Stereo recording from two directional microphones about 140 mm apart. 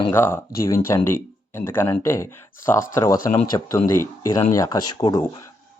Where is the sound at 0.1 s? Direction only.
15° left (ahead or behind).